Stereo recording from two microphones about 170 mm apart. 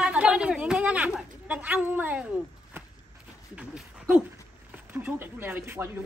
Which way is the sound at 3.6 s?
5° right (ahead or behind).